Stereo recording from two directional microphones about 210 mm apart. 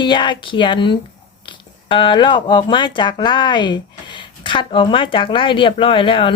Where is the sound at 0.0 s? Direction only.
20° left (ahead or behind).